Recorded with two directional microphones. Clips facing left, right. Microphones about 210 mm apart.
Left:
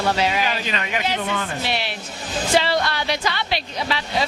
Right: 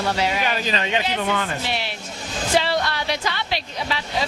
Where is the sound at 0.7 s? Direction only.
30° right (ahead or behind).